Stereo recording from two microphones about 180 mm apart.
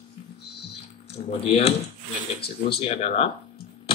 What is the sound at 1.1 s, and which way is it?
Speech, 35° left (ahead or behind).